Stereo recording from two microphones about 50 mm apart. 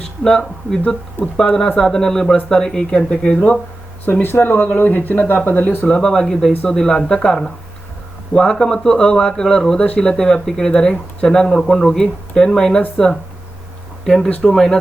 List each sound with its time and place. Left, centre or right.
0.3 s speech: centre
4.0 s speech: left
5.8 s speech: centre
8.4 s speech: centre
14.0 s speech: centre